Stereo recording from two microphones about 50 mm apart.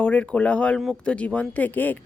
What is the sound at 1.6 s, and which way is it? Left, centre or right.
Speech, left.